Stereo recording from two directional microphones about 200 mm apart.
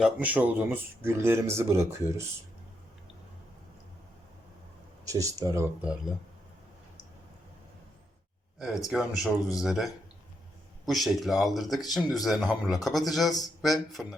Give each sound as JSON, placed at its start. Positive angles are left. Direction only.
{"t": 0.0, "sound": "speech", "side_deg": -10}
{"t": 5.0, "sound": "speech", "side_deg": -15}
{"t": 8.9, "sound": "speech", "side_deg": 0}